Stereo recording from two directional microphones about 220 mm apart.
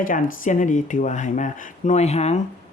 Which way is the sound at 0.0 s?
40° left (ahead or behind).